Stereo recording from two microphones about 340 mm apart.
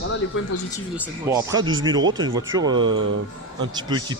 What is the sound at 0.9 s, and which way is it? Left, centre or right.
Speech, centre.